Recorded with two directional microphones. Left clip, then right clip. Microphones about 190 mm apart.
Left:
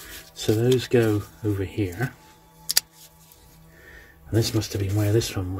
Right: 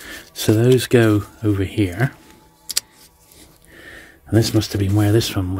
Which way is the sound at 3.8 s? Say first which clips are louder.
Right 9 dB; 60° right (ahead or behind).